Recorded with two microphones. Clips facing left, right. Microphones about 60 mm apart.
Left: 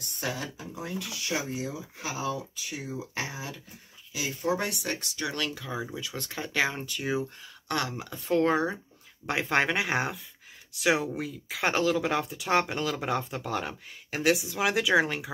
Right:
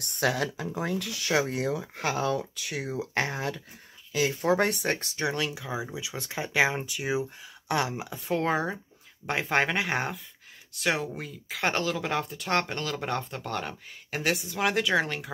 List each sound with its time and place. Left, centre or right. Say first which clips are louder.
0.2 s speech: right 7 dB; right
5.3 s speech: right 2 dB; centre